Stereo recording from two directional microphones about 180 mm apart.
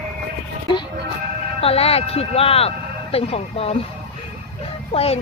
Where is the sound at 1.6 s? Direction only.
35° left (ahead or behind).